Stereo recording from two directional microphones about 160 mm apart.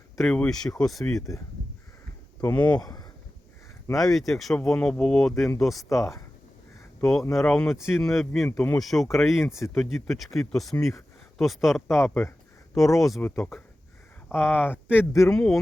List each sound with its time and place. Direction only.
0.2 s speech: 5° left (ahead or behind)
2.4 s speech: 10° left (ahead or behind)
2.6 s speech: 25° left (ahead or behind)
3.9 s speech: centre (ahead or behind)
7.0 s speech: centre (ahead or behind)
9.5 s speech: 15° left (ahead or behind)
9.9 s speech: centre (ahead or behind)
14.9 s speech: 20° left (ahead or behind)
15.3 s speech: 5° left (ahead or behind)